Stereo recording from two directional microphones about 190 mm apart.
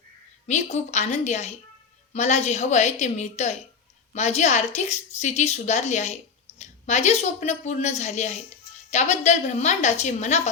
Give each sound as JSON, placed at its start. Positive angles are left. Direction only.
{"t": 0.4, "sound": "a woman's voice", "side_deg": 35}